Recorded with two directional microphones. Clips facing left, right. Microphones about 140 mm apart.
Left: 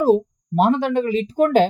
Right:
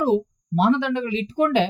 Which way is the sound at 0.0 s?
45° left (ahead or behind).